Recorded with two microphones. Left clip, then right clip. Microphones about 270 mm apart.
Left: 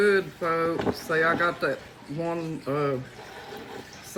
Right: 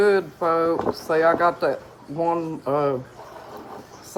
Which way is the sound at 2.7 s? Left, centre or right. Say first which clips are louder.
Right 5 dB; right.